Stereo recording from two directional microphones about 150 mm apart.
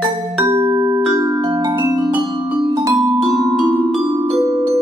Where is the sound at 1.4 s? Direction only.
30° right (ahead or behind).